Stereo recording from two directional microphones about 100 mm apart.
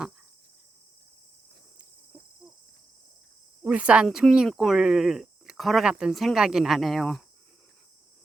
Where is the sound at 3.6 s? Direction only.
10° right (ahead or behind).